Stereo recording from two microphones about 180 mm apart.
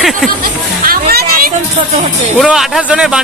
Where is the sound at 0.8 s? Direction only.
55° right (ahead or behind).